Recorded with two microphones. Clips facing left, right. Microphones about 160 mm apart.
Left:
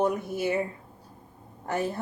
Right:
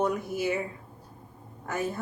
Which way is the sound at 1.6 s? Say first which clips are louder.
Left 2 dB; 30° left (ahead or behind).